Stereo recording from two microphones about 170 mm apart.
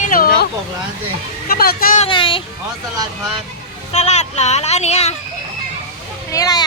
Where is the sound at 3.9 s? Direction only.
40° left (ahead or behind).